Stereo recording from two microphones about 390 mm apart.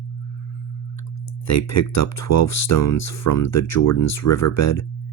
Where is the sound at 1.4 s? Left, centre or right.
Left.